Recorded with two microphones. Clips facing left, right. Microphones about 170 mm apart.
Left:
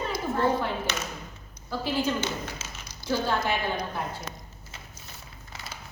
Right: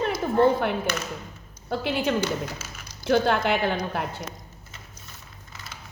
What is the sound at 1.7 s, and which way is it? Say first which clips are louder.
A woman's voice: right 3 dB; 70° right (ahead or behind).